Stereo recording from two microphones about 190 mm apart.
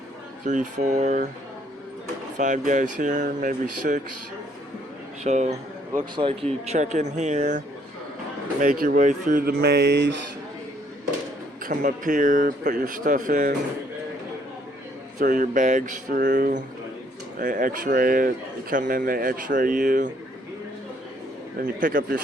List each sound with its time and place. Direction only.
0.4 s speech: 40° right (ahead or behind)
2.4 s speech: 40° right (ahead or behind)
5.2 s speech: 35° right (ahead or behind)
6.7 s speech: 40° right (ahead or behind)
8.6 s speech: 50° right (ahead or behind)
11.6 s speech: 45° right (ahead or behind)
15.2 s speech: 45° right (ahead or behind)
21.8 s speech: 45° right (ahead or behind)